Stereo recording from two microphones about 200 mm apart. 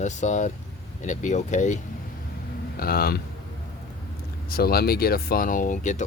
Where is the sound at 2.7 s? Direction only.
50° left (ahead or behind).